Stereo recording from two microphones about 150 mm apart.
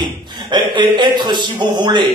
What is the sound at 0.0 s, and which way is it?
A man's voice, 30° right (ahead or behind).